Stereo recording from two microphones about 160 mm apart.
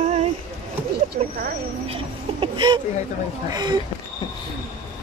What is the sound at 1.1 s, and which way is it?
Speech, 90° right.